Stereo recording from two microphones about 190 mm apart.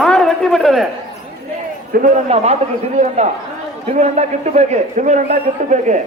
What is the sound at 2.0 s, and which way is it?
A man's voice, 35° right (ahead or behind).